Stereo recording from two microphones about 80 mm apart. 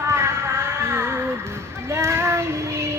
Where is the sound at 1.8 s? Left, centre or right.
Right.